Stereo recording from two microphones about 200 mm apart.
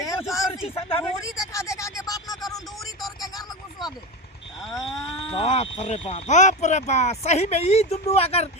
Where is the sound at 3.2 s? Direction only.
20° left (ahead or behind).